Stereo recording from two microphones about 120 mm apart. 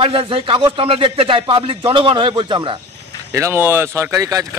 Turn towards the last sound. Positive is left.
turn(degrees=-30)  # may be behind; listen again after turning